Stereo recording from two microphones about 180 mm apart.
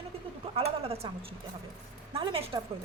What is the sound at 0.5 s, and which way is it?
A woman's voice, 35° right (ahead or behind).